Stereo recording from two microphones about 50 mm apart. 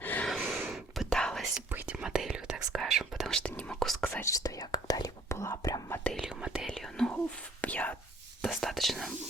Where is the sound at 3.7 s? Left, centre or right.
Centre.